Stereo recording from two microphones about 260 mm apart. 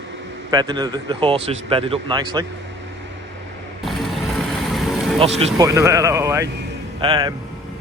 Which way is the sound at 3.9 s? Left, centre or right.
Centre.